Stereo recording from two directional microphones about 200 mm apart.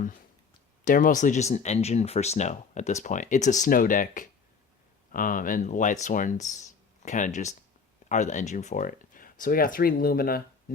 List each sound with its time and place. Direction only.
0.9 s speech: 40° left (ahead or behind)